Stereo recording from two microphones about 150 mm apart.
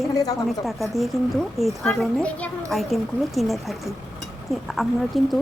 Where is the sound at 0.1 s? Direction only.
25° left (ahead or behind).